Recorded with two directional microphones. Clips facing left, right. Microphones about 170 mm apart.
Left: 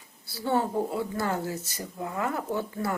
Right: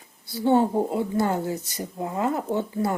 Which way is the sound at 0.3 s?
20° right (ahead or behind).